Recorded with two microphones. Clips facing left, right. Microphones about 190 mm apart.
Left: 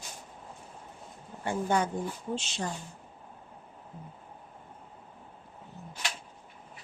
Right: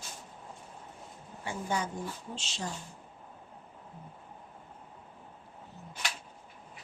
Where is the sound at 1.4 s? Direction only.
55° left (ahead or behind).